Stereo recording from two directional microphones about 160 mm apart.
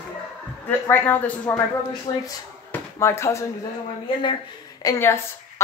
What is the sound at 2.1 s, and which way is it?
A woman's voice, 25° left (ahead or behind).